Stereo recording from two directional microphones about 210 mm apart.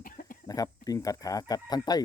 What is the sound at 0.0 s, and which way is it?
Chicken, 40° left (ahead or behind).